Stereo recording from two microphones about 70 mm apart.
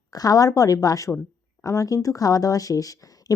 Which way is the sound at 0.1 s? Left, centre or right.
Left.